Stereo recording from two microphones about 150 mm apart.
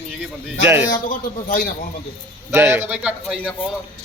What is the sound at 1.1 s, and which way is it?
Speech, 65° left (ahead or behind).